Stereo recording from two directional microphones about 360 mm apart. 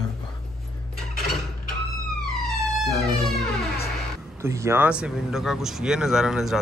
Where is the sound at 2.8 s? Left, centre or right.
Centre.